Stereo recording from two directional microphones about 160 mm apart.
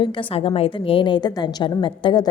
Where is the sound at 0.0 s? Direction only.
30° left (ahead or behind).